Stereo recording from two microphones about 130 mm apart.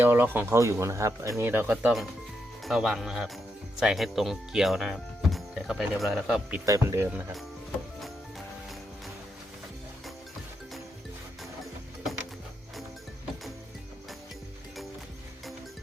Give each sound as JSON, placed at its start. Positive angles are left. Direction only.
{"t": 0.0, "sound": "speech", "side_deg": -15}
{"t": 2.6, "sound": "speech", "side_deg": 0}
{"t": 6.7, "sound": "speech", "side_deg": -25}